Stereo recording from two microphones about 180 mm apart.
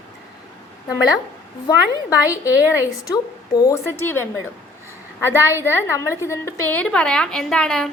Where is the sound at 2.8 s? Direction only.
20° left (ahead or behind); by 7.8 s 5° left (ahead or behind).